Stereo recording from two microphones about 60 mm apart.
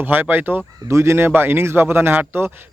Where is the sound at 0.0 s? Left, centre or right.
Right.